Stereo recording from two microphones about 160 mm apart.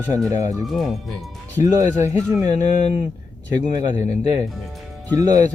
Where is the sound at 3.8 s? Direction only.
25° right (ahead or behind).